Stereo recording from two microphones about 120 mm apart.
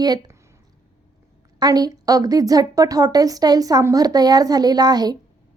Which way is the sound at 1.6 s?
30° right (ahead or behind).